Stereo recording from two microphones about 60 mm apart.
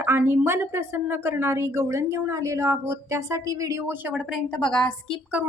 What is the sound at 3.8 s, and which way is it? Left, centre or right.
Speech, right.